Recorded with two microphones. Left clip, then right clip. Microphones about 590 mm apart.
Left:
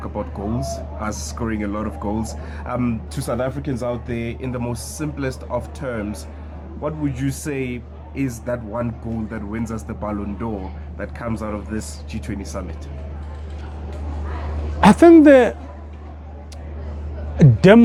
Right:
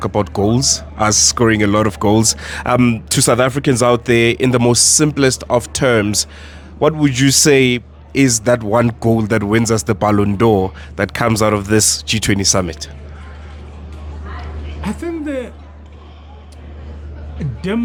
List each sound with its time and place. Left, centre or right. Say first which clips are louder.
0.0 s a man's voice: right 11 dB; right
14.8 s speech: left 15 dB; left
17.3 s speech: left 11 dB; left